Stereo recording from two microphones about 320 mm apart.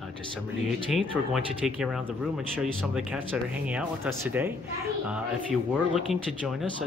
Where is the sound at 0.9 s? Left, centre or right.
Centre.